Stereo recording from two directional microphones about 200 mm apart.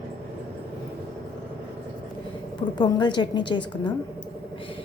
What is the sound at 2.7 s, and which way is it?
A woman's voice, 20° left (ahead or behind).